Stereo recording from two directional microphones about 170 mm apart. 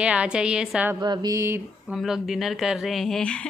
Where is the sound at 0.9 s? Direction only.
20° right (ahead or behind).